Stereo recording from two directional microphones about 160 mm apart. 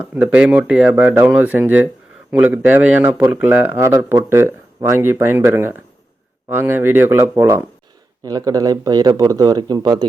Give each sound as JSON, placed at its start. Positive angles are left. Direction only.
{"t": 0.1, "sound": "speech", "side_deg": -10}